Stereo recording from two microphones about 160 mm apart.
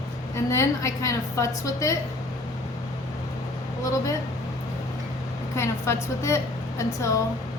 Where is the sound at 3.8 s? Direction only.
20° left (ahead or behind).